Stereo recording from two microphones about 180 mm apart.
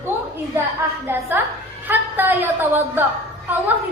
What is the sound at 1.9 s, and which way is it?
A woman's voice, 10° right (ahead or behind).